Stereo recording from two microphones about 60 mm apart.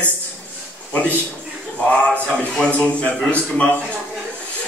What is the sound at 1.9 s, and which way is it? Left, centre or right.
A man's voice, centre.